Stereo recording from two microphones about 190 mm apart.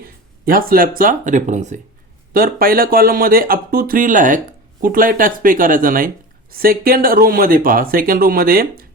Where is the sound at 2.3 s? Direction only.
50° right (ahead or behind).